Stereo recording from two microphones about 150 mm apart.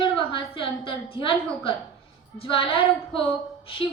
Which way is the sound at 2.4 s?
35° left (ahead or behind).